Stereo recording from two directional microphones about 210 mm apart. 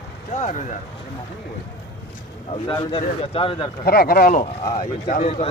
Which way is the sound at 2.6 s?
25° left (ahead or behind).